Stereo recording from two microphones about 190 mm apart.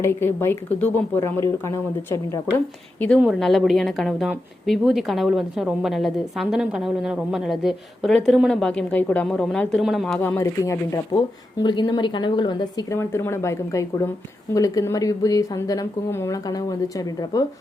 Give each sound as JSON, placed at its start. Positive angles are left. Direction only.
{"t": 0.0, "sound": "speech", "side_deg": 10}
{"t": 3.2, "sound": "a woman's voice", "side_deg": 0}